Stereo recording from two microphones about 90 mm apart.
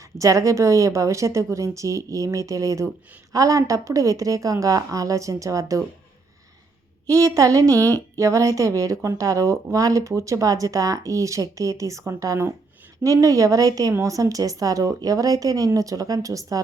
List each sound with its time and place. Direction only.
0.2 s speech: 35° right (ahead or behind)
7.1 s speech: 40° right (ahead or behind)